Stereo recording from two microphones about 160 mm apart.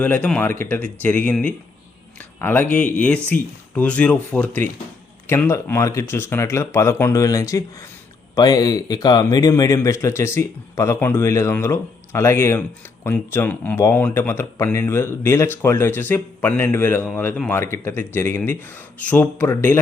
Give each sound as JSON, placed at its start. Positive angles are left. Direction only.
{"t": 0.0, "sound": "speech", "side_deg": 10}